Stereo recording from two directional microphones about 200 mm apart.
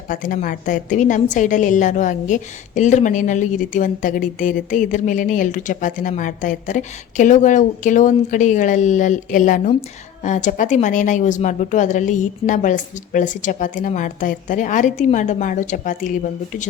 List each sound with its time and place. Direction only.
0.1 s a woman's voice: 40° left (ahead or behind)